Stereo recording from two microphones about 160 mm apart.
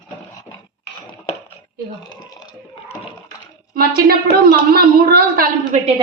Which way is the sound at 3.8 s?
70° right (ahead or behind).